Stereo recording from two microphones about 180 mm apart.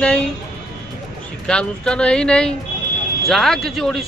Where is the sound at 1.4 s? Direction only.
5° left (ahead or behind).